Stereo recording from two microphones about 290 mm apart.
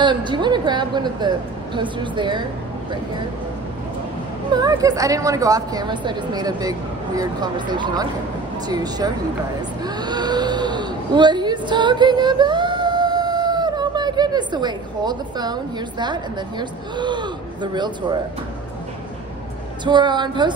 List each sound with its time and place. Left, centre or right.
0.0 s a woman's voice: centre
4.5 s a woman's voice: centre
19.8 s a woman's voice: centre